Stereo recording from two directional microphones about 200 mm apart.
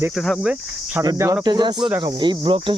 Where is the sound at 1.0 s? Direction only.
15° right (ahead or behind).